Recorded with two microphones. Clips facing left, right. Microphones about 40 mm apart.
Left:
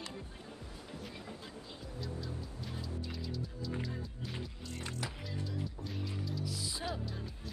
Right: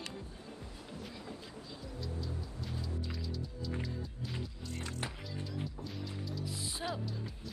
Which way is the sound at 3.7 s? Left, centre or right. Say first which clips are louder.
Right 1 dB; centre.